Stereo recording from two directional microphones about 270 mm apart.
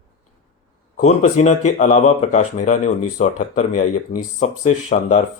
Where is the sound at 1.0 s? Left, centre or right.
Left.